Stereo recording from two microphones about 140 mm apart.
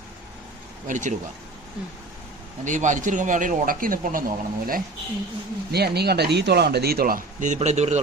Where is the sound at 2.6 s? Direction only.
65° right (ahead or behind); by 4.8 s 90° right.